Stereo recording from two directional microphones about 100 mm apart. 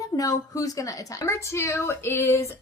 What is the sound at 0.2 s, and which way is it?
A woman's voice, 35° left (ahead or behind).